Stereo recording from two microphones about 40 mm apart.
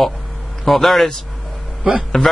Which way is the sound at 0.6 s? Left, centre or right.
Centre.